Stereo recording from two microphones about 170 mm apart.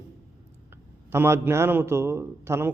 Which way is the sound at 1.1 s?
15° right (ahead or behind).